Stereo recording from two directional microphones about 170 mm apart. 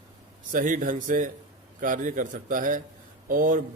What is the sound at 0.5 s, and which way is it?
Speech, 50° right (ahead or behind).